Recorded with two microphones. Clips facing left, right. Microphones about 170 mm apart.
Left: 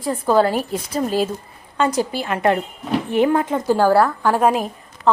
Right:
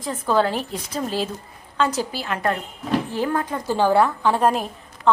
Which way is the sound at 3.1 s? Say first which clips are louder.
Left 7 dB; 20° left (ahead or behind).